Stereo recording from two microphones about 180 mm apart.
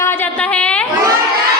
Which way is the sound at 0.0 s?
10° left (ahead or behind).